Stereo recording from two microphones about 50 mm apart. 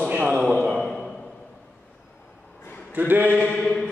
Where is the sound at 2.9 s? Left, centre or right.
Right.